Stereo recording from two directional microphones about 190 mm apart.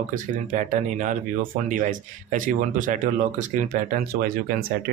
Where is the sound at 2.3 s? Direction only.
45° right (ahead or behind).